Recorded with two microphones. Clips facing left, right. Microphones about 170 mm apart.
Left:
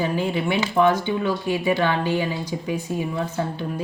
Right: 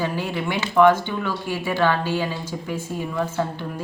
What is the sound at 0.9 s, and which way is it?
Speech, 15° left (ahead or behind).